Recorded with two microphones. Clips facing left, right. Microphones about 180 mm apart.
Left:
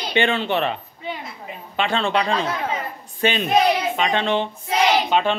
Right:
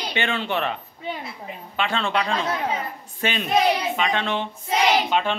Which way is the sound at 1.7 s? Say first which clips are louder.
Left 3 dB; 30° left (ahead or behind).